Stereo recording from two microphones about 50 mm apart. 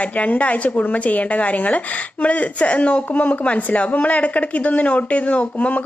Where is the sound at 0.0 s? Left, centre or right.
Left.